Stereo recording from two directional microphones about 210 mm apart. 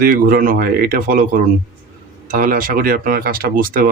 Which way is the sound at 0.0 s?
45° right (ahead or behind).